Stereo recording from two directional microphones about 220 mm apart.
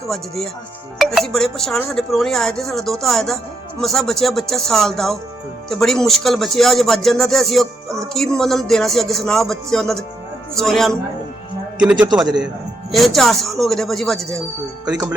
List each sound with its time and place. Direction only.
0.9 s speech: centre (ahead or behind)